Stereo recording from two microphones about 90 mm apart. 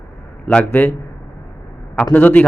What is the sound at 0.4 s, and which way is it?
Speech, 20° left (ahead or behind).